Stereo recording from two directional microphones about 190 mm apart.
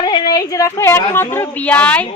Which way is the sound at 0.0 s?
20° left (ahead or behind).